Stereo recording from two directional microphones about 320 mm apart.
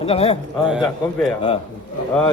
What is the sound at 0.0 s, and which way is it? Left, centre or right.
Speech, centre.